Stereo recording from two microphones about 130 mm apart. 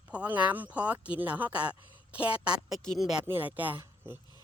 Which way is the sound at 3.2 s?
15° right (ahead or behind).